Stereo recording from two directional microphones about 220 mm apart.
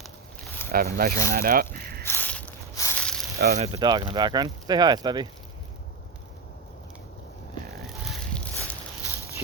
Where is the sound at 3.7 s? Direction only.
20° right (ahead or behind).